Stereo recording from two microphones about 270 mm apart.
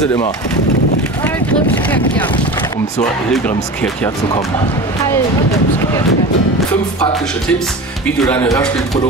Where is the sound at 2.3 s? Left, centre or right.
Centre.